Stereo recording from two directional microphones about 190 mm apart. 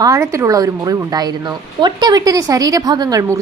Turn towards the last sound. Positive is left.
turn(degrees=-20)  # may be behind; listen again after turning